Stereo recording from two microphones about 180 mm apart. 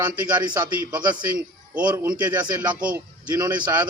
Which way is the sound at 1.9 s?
20° right (ahead or behind).